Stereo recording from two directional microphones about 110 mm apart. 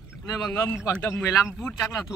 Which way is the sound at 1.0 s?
20° left (ahead or behind).